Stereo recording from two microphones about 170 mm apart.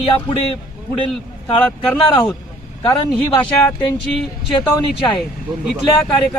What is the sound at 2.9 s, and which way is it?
Speech, 10° left (ahead or behind).